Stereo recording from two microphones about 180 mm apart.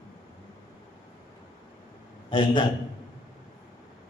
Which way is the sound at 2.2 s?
25° left (ahead or behind).